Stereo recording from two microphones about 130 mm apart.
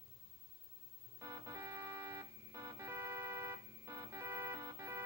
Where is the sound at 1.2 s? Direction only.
20° right (ahead or behind).